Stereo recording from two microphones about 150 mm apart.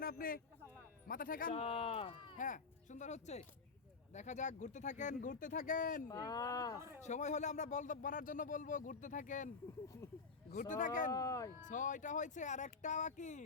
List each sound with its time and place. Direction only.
0.0 s a man's voice: 75° left (ahead or behind)
1.5 s speech: 40° left (ahead or behind)
2.4 s speech: 55° left (ahead or behind)
6.1 s speech: 25° left (ahead or behind)
6.7 s speech: 15° right (ahead or behind)
7.0 s speech: 50° left (ahead or behind)
10.5 s speech: 55° left (ahead or behind)
11.1 s speech: 25° left (ahead or behind)
11.6 s speech: 60° left (ahead or behind)